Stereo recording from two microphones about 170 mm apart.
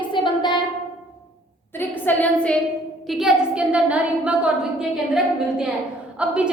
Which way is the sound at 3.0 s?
Centre (ahead or behind).